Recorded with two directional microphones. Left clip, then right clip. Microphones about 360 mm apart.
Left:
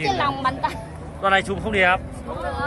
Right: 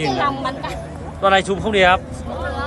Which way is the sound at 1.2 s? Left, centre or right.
Centre.